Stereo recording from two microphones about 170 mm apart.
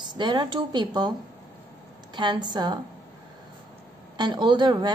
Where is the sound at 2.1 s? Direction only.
25° right (ahead or behind).